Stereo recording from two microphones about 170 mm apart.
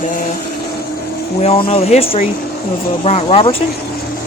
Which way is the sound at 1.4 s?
35° left (ahead or behind).